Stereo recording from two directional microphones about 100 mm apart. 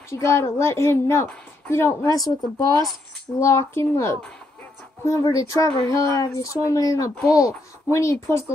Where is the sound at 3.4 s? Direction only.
30° left (ahead or behind).